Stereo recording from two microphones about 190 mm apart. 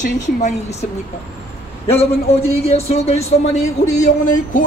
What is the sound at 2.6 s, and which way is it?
A man's voice, 35° left (ahead or behind).